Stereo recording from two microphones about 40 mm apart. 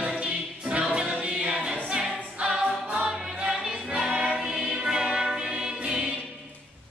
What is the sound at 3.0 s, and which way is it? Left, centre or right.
Music, centre.